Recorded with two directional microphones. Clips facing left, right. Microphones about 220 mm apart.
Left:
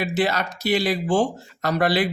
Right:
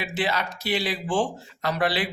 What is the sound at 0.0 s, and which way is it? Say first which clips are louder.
Speech: left 5 dB; 40° left (ahead or behind).